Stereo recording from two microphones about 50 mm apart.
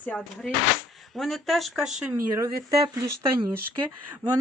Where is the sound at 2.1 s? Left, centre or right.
Right.